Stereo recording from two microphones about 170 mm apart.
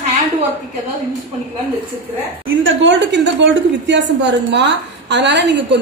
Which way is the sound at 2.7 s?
90° right.